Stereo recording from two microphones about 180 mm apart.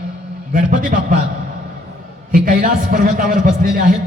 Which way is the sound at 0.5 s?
50° right (ahead or behind).